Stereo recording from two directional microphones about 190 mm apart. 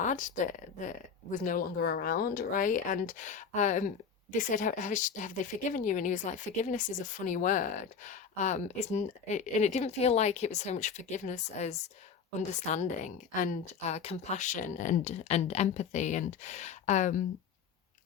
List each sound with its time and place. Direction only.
0.0 s speech: 40° left (ahead or behind)